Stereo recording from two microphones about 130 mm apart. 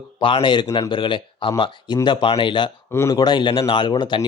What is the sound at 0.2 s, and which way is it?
Speech, 40° left (ahead or behind).